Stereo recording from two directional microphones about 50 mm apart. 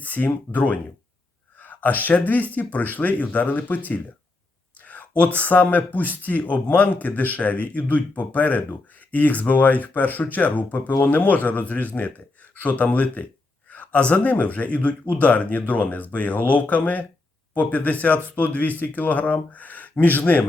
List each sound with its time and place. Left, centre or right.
0.0 s speech: left
4.9 s speech: left